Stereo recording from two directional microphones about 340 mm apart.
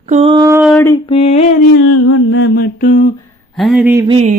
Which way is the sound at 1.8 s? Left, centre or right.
Left.